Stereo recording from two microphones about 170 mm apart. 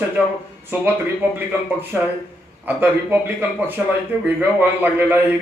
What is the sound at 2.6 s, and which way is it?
Speech, 10° right (ahead or behind).